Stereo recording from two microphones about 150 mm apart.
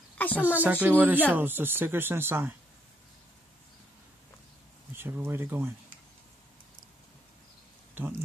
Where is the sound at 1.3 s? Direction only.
15° right (ahead or behind).